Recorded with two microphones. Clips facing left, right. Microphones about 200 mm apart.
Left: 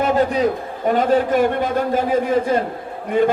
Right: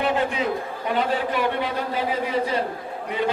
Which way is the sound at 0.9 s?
45° left (ahead or behind).